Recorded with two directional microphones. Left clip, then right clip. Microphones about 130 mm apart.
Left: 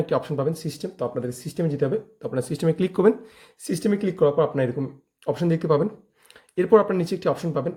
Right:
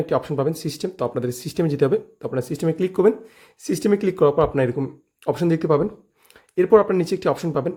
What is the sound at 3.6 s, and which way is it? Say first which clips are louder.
Speech: right 5 dB; 30° right (ahead or behind).